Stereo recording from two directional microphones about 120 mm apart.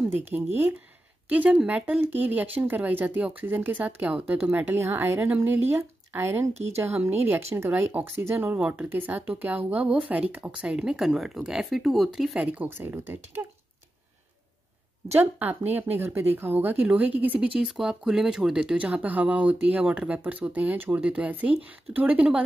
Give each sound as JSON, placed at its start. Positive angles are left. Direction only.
{"t": 0.3, "sound": "speech", "side_deg": -20}
{"t": 6.5, "sound": "speech", "side_deg": -65}
{"t": 6.9, "sound": "speech", "side_deg": -15}
{"t": 12.5, "sound": "speech", "side_deg": -20}
{"t": 15.1, "sound": "speech", "side_deg": -15}